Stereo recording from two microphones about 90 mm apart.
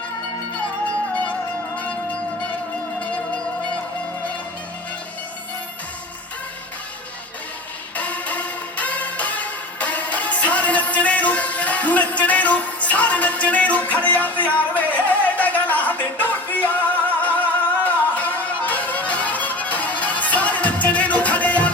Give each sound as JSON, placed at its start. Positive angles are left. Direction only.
{"t": 1.1, "sound": "music", "side_deg": 15}
{"t": 7.9, "sound": "music", "side_deg": 15}